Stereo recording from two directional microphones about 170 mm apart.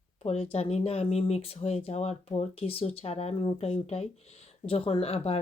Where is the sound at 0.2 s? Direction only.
35° left (ahead or behind).